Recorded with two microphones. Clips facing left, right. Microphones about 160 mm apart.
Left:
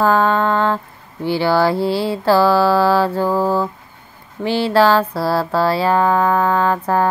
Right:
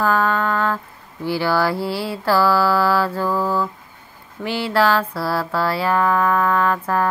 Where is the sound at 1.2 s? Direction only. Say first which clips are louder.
Left 4 dB; 25° left (ahead or behind).